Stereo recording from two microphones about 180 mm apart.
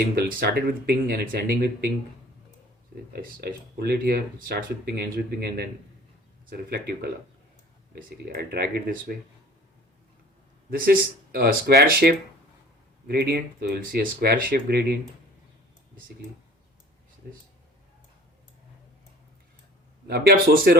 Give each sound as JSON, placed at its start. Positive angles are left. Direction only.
{"t": 0.0, "sound": "speech", "side_deg": -55}
{"t": 3.1, "sound": "speech", "side_deg": -60}
{"t": 10.7, "sound": "speech", "side_deg": -55}
{"t": 20.1, "sound": "speech", "side_deg": -60}